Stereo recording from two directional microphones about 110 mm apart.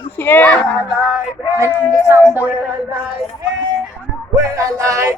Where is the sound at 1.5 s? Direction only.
25° right (ahead or behind).